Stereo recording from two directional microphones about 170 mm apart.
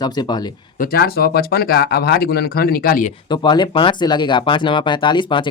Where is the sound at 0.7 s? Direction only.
60° left (ahead or behind).